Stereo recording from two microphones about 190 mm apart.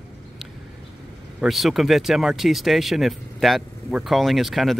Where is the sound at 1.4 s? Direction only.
Centre (ahead or behind).